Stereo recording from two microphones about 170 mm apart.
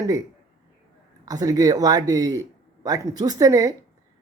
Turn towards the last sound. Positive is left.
turn(degrees=-20)  # may be behind; listen again after turning